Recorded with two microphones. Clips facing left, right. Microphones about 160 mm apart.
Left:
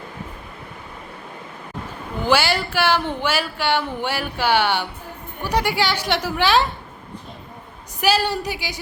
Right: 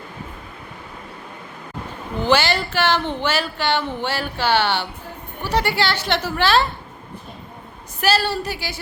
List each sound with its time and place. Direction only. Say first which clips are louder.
2.2 s speech: right 1 dB; 10° left (ahead or behind)
8.0 s speech: even; 15° left (ahead or behind)